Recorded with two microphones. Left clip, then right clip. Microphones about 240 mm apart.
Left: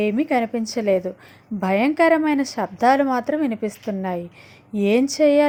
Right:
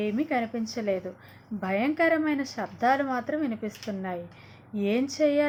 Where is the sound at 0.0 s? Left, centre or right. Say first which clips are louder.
Left 8 dB; left.